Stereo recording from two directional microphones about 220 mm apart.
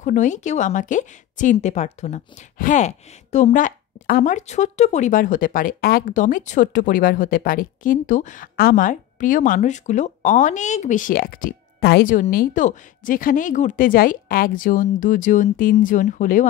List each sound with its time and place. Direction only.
0.0 s speech: 35° left (ahead or behind)